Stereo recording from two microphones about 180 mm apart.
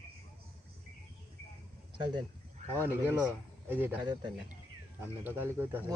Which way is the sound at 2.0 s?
25° right (ahead or behind).